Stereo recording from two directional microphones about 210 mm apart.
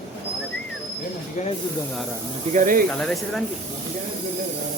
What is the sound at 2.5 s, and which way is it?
Speech, 40° right (ahead or behind).